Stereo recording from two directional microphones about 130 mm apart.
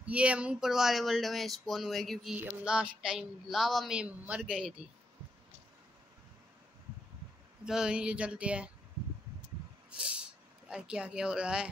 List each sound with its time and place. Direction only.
0.0 s a woman's voice: 10° right (ahead or behind)
2.3 s a woman's voice: 10° right (ahead or behind)
7.6 s speech: 5° right (ahead or behind)
9.8 s a sound: 10° right (ahead or behind)
10.7 s speech: 5° right (ahead or behind)